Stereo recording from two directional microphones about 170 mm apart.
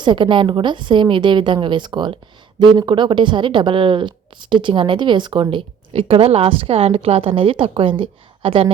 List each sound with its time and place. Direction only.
0.0 s speech: 25° right (ahead or behind)